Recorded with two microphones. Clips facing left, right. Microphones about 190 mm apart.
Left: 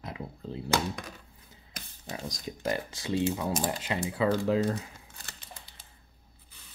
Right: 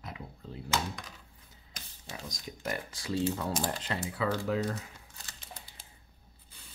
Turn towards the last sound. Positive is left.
turn(degrees=30)  # may be behind; listen again after turning